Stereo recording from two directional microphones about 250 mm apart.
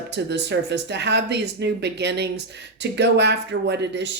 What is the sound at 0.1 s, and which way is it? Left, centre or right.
A woman's voice, right.